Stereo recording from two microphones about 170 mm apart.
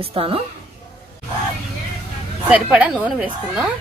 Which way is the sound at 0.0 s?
35° right (ahead or behind).